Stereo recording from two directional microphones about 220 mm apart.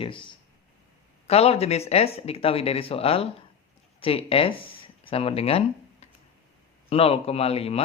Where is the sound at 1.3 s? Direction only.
30° left (ahead or behind).